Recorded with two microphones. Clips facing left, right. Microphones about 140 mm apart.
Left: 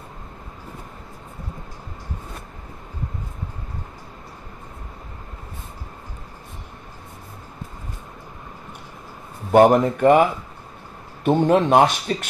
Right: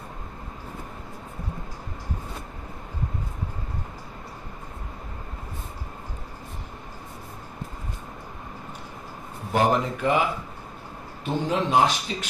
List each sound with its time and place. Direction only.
9.5 s speech: 55° left (ahead or behind)
11.2 s speech: 60° left (ahead or behind)